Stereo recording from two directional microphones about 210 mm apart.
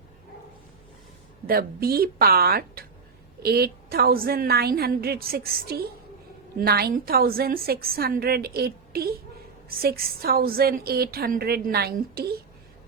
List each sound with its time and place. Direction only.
1.5 s a woman's voice: 45° right (ahead or behind)